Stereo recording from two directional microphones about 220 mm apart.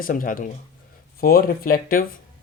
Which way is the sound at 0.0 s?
40° left (ahead or behind).